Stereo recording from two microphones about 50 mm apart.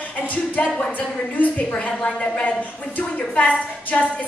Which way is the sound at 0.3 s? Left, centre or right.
Left.